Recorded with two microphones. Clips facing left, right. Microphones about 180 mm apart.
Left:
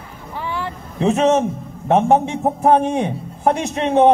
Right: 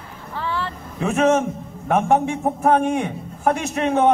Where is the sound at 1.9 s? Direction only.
25° left (ahead or behind).